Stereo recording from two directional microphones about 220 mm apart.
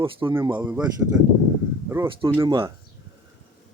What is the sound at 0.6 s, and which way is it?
Speech, 10° right (ahead or behind).